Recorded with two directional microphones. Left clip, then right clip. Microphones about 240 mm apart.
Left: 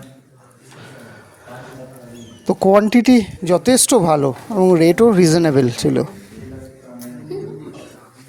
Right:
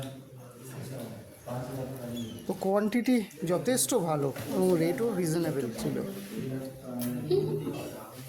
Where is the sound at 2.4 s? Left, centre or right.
Right.